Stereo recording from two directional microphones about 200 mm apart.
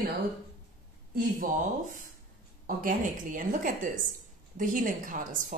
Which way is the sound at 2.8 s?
45° right (ahead or behind).